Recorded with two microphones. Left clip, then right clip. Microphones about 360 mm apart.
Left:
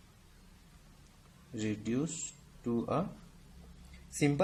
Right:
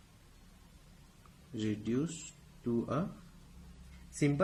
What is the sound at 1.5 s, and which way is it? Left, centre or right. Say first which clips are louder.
Speech: even; centre.